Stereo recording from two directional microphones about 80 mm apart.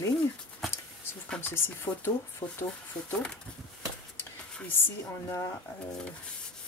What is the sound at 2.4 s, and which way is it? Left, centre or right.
Speech, left.